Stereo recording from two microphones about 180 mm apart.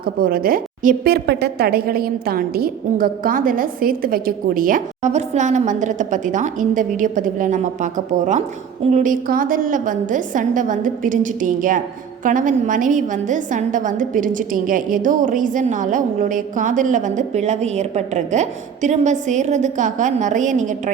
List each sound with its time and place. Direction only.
0.0 s a woman's voice: 55° right (ahead or behind)